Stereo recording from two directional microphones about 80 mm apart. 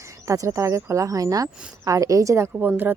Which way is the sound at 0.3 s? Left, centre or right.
Right.